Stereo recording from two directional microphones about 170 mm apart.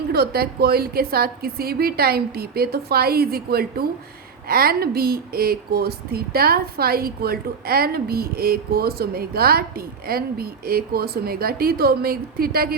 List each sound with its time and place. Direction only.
0.1 s speech: 65° right (ahead or behind)